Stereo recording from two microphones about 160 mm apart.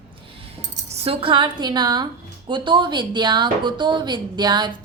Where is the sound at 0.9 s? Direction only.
40° right (ahead or behind).